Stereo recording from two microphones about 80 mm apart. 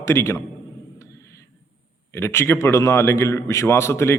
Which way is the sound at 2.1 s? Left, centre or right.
Left.